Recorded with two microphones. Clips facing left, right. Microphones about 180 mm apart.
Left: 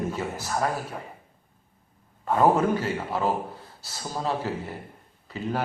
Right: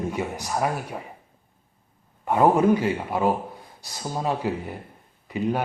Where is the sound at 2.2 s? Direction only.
15° right (ahead or behind).